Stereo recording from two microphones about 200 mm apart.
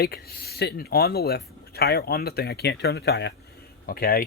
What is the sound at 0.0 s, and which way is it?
Speech, 50° left (ahead or behind).